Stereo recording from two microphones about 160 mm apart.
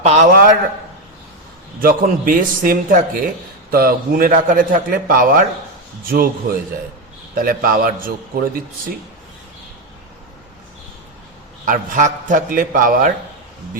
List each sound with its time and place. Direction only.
0.0 s a sound: 45° right (ahead or behind)
1.8 s a man's voice: 65° right (ahead or behind)
11.6 s a man's voice: 55° right (ahead or behind)